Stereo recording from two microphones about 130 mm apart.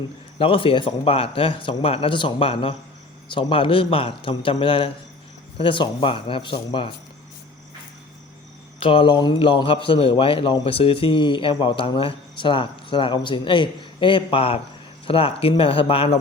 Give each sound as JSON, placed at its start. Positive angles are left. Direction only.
{"t": 0.3, "sound": "a man's voice", "side_deg": 45}
{"t": 8.8, "sound": "a man's voice", "side_deg": 45}